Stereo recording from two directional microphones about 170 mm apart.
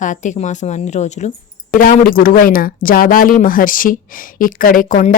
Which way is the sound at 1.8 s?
55° left (ahead or behind).